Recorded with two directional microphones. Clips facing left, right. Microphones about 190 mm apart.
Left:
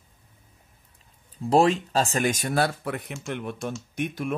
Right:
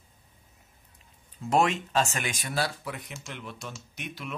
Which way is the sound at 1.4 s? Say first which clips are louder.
Left 5 dB; 30° left (ahead or behind).